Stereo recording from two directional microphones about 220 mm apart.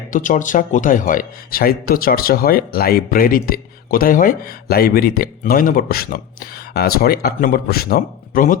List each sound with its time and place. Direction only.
0.1 s speech: 35° left (ahead or behind)